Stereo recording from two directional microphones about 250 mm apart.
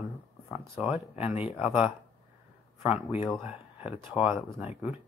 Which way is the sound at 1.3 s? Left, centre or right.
Left.